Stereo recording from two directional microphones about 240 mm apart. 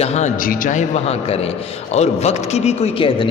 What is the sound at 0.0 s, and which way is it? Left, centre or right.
A man's voice, left.